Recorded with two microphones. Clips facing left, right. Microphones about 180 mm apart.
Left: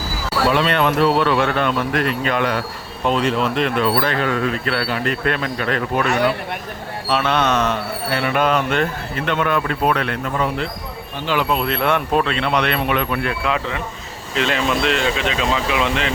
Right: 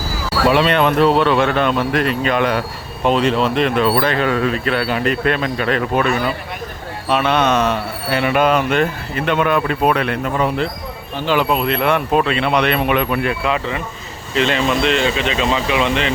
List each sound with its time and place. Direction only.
0.6 s speech: 20° right (ahead or behind)
6.1 s speech: 75° left (ahead or behind)
7.1 s speech: 15° right (ahead or behind)
11.5 s speech: 5° right (ahead or behind)
13.4 s speech: centre (ahead or behind)